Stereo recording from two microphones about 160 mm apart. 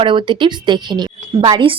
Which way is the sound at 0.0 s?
30° right (ahead or behind).